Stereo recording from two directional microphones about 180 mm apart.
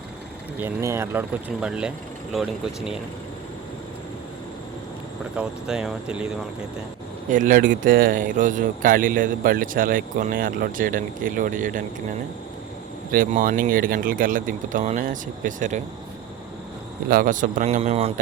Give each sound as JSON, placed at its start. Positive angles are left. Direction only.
{"t": 0.6, "sound": "speech", "side_deg": -15}
{"t": 5.4, "sound": "speech", "side_deg": -5}
{"t": 7.3, "sound": "speech", "side_deg": -45}
{"t": 13.1, "sound": "speech", "side_deg": -50}
{"t": 17.1, "sound": "speech", "side_deg": -50}